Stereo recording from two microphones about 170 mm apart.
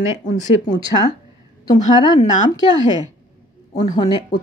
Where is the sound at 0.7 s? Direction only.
25° left (ahead or behind).